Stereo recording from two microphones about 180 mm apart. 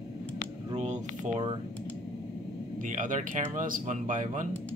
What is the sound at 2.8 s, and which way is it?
Speech, 45° right (ahead or behind).